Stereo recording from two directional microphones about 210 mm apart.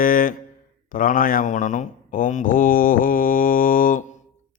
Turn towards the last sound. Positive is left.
turn(degrees=40)  # may be behind; listen again after turning